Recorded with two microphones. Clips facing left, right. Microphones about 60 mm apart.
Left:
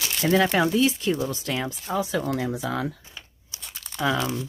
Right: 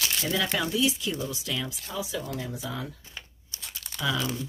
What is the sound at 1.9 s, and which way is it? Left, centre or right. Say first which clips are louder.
Speech: left 9 dB; left.